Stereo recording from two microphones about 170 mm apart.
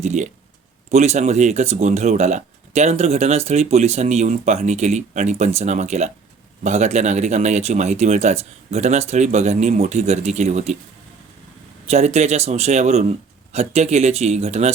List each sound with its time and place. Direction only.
0.0 s speech: 45° right (ahead or behind)
11.9 s speech: 40° right (ahead or behind)